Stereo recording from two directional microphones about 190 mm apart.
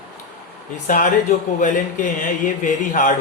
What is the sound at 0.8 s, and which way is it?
Speech, 40° left (ahead or behind).